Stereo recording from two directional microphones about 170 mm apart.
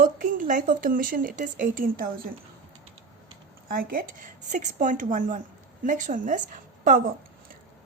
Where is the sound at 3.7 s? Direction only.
60° right (ahead or behind).